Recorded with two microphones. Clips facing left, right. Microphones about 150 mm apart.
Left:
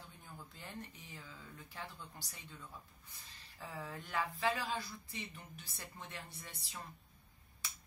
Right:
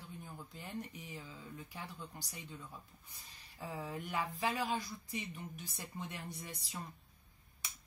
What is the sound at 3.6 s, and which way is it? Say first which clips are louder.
Speech: right 4 dB; 15° right (ahead or behind).